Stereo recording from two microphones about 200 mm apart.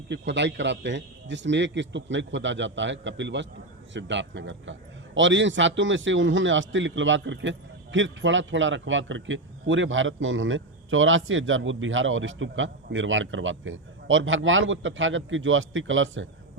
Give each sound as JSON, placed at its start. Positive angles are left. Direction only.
{"t": 0.1, "sound": "a man's voice", "side_deg": -60}